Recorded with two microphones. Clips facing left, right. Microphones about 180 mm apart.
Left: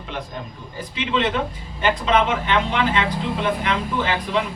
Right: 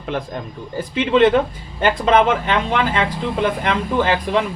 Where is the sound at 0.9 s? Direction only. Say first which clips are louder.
Right 8 dB; 50° right (ahead or behind).